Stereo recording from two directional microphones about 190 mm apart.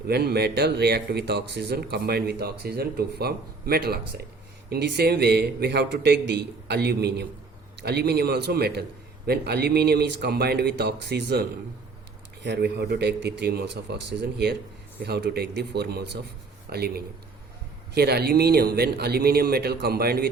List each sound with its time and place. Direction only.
0.1 s speech: 60° right (ahead or behind)